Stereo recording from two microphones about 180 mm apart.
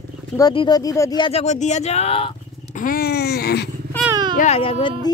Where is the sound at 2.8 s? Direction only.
55° left (ahead or behind).